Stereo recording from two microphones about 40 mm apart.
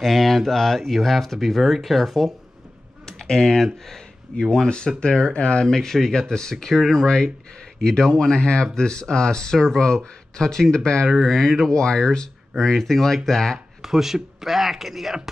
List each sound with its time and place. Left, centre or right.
0.0 s speech: centre
3.1 s speech: centre
4.6 s speech: left
5.7 s speech: centre
8.3 s speech: left
13.8 s speech: centre